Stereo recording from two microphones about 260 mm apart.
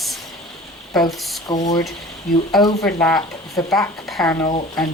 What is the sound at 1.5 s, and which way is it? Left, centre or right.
Speech, centre.